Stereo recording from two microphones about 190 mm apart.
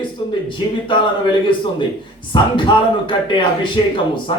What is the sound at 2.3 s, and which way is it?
Speech, 25° left (ahead or behind).